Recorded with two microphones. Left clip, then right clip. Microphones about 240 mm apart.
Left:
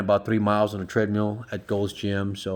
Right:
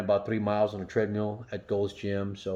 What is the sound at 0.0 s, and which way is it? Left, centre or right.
Speech, left.